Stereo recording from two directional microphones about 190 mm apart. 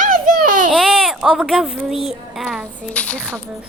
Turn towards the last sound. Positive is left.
turn(degrees=5)  # may be behind; listen again after turning